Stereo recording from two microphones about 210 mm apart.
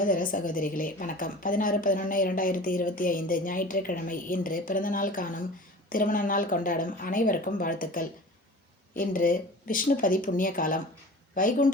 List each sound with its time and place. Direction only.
0.0 s a woman's voice: 40° left (ahead or behind)